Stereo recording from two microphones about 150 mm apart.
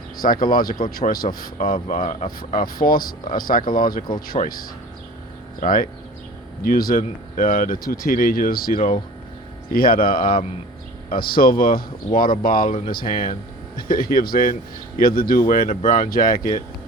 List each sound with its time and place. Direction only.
0.2 s a man's voice: 70° left (ahead or behind)